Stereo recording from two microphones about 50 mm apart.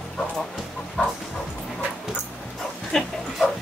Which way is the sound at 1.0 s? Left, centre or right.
Left.